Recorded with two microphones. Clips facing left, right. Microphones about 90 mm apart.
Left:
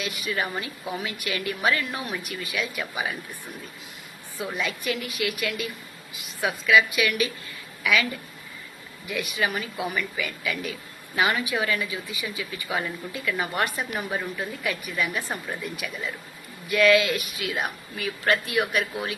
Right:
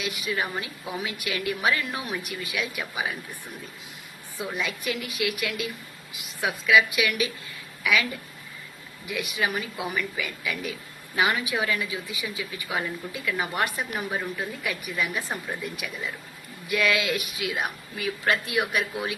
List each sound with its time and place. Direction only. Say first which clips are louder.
0.0 s speech: even; 5° right (ahead or behind)
4.4 s speech: left 1 dB; centre (ahead or behind)
9.0 s speech: left 1 dB; 5° right (ahead or behind)